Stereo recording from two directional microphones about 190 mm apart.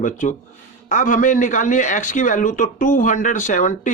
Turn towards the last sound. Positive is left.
turn(degrees=40)  # may be behind; listen again after turning